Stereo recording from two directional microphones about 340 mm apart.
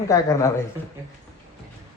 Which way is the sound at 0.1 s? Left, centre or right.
Centre.